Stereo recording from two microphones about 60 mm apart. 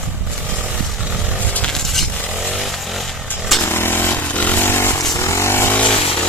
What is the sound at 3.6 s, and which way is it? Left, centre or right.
Vehicle, left.